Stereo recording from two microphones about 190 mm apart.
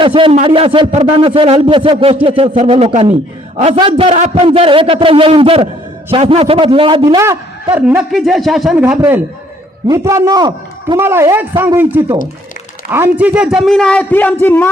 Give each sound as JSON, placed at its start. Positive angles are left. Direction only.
{"t": 0.0, "sound": "a man's voice", "side_deg": -25}
{"t": 7.8, "sound": "a man's voice", "side_deg": -5}
{"t": 9.0, "sound": "a man's voice", "side_deg": -10}